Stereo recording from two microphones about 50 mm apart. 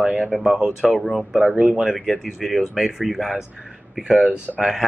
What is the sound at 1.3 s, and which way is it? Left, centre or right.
Speech, centre.